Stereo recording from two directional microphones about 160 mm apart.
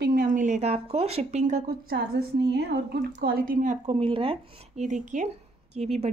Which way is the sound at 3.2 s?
65° right (ahead or behind).